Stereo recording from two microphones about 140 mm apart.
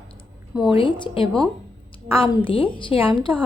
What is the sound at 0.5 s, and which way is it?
Speech, 5° right (ahead or behind).